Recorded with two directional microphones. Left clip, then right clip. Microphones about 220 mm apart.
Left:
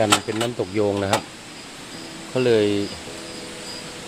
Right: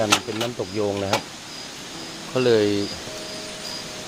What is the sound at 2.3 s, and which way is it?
Speech, 5° left (ahead or behind).